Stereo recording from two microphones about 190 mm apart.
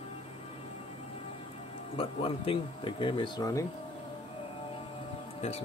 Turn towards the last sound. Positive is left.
turn(degrees=30)  # may be behind; listen again after turning